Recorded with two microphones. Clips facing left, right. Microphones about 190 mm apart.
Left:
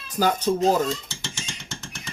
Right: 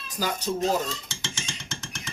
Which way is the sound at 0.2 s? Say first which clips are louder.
Left 7 dB; 55° left (ahead or behind).